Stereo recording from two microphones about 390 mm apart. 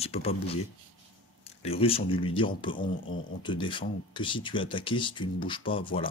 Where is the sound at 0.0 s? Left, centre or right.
Centre.